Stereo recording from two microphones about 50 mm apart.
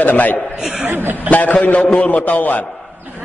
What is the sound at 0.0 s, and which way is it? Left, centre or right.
Speech, left.